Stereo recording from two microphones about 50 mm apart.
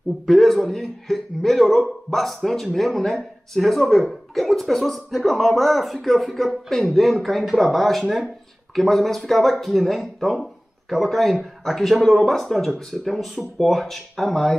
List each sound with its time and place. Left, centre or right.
0.3 s speech: centre